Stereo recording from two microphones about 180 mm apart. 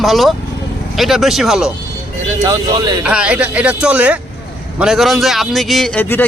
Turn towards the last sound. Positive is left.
turn(degrees=10)  # may be behind; listen again after turning